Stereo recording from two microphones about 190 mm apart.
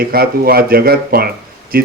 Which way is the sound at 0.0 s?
55° right (ahead or behind).